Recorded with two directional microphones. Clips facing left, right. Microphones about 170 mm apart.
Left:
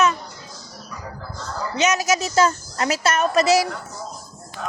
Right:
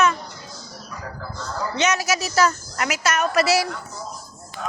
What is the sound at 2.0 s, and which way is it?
A woman's voice, 25° left (ahead or behind).